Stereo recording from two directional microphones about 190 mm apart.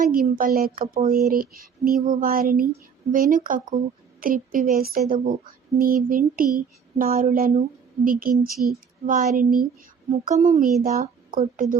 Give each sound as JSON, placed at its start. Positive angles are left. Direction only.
{"t": 0.3, "sound": "a child's voice", "side_deg": -50}